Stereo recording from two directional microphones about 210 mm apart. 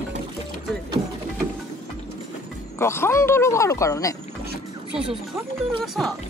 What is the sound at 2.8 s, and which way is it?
Speech, 10° left (ahead or behind).